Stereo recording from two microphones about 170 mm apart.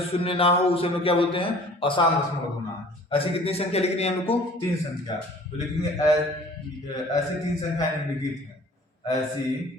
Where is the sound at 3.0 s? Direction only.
35° left (ahead or behind).